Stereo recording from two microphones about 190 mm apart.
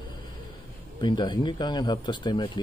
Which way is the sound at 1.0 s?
25° left (ahead or behind).